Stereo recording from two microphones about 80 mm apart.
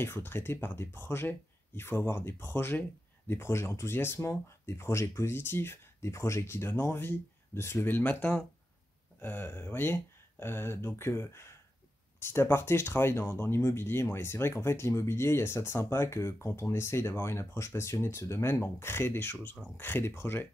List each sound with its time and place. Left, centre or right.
0.0 s speech: left